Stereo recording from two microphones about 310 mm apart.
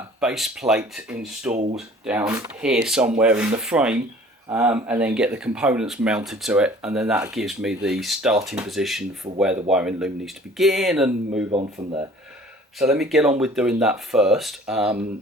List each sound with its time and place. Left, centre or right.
0.2 s speech: centre
11.5 s speech: centre
12.8 s speech: centre